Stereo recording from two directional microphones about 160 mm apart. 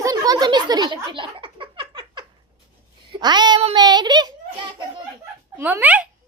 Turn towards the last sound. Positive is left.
turn(degrees=-10)  # may be behind; listen again after turning